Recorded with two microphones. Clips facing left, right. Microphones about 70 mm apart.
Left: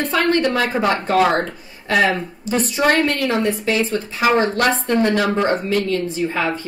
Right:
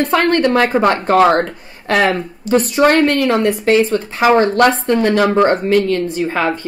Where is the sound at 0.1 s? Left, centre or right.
Right.